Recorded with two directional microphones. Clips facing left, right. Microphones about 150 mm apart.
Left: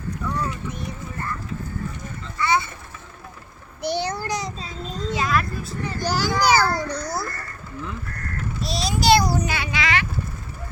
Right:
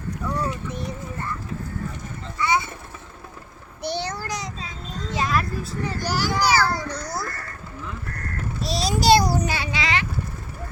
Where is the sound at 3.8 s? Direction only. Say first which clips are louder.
Left 3 dB; 15° left (ahead or behind).